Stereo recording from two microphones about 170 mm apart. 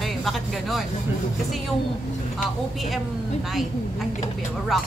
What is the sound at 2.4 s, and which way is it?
Speech, centre (ahead or behind).